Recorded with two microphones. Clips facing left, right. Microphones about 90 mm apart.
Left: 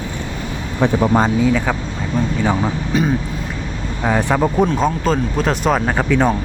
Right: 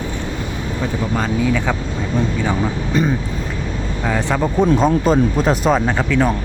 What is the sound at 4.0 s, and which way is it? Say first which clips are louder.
Speech: left 3 dB; 15° left (ahead or behind).